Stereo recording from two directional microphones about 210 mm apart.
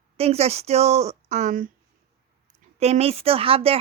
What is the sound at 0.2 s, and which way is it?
A woman's voice, 30° right (ahead or behind).